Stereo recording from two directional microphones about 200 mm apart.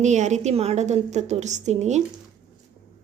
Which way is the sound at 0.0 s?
35° right (ahead or behind).